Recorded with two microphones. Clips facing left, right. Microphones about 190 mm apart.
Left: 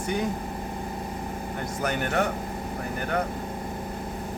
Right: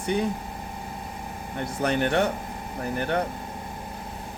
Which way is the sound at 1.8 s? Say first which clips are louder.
Right 4 dB; 30° right (ahead or behind).